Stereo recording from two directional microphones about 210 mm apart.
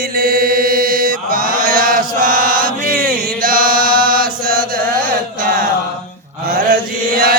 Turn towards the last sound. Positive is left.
turn(degrees=-45)  # may be behind; listen again after turning